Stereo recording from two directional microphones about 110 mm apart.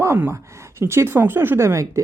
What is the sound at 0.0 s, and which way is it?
Speech, 25° right (ahead or behind).